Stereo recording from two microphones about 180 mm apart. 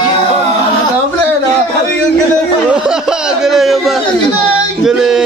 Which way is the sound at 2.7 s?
5° right (ahead or behind).